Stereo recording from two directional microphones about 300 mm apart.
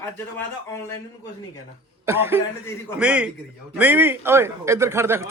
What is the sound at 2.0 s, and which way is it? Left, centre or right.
A man's voice, centre.